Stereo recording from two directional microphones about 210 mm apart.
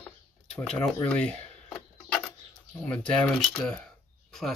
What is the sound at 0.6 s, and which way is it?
Speech, 5° left (ahead or behind).